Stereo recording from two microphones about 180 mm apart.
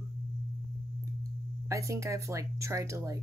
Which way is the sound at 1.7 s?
15° right (ahead or behind).